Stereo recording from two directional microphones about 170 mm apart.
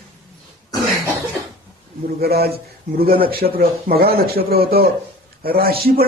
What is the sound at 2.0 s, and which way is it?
A man's voice, 65° right (ahead or behind).